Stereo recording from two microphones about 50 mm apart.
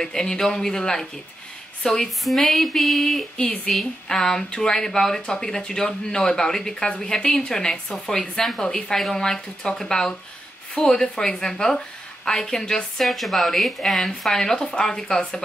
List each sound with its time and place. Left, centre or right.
0.0 s a woman's voice: centre
2.2 s a sound: centre
4.1 s speech: centre
8.6 s speech: left
13.0 s speech: centre